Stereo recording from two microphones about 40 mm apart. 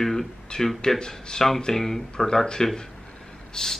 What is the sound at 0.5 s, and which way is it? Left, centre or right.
Speech, left.